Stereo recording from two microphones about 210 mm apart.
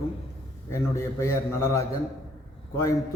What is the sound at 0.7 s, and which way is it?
A man's voice, 15° left (ahead or behind).